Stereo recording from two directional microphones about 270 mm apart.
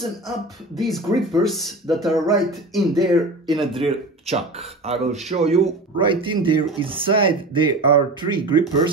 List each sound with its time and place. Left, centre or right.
0.0 s speech: centre
3.5 s speech: centre